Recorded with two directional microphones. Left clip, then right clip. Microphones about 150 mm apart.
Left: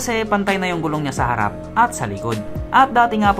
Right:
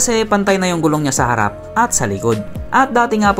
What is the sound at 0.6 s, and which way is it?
Speech, 45° right (ahead or behind).